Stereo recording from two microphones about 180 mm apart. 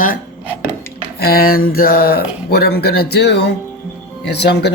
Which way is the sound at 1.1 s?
55° left (ahead or behind).